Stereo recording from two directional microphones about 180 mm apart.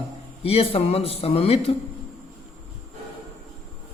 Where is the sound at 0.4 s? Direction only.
30° left (ahead or behind).